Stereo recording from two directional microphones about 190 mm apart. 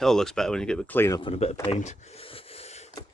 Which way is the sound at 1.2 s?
35° left (ahead or behind).